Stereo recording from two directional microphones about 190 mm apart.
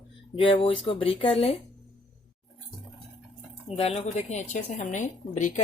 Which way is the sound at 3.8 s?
35° left (ahead or behind).